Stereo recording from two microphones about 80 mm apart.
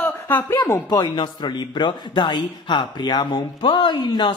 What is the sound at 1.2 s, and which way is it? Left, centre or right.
Speech, left.